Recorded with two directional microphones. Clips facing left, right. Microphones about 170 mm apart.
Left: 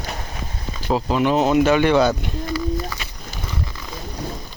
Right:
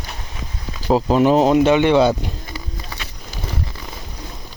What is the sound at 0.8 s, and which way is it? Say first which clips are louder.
Speech: right 5 dB; 35° right (ahead or behind).